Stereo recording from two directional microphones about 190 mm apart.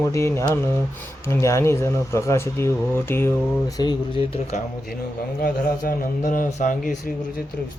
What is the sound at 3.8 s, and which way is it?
Speech, 25° left (ahead or behind).